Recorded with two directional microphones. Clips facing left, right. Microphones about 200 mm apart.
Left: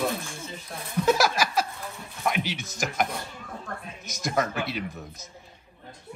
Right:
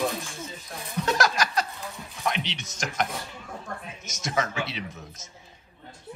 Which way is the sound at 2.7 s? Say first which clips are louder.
Left 1 dB; centre (ahead or behind).